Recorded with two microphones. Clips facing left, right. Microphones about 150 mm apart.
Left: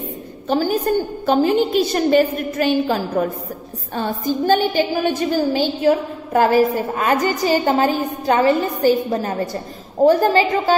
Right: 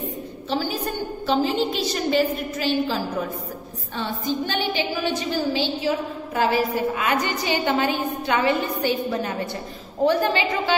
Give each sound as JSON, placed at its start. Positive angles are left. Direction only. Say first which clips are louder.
{"t": 0.5, "sound": "a woman's voice", "louder": "left 8 dB", "side_deg": 50}